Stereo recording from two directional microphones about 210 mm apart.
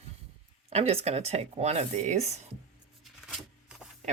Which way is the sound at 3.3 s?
Centre (ahead or behind).